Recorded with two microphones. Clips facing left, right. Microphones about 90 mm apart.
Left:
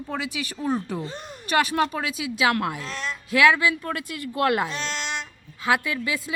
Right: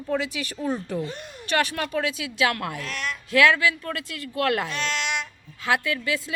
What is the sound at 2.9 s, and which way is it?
Speech, 25° left (ahead or behind).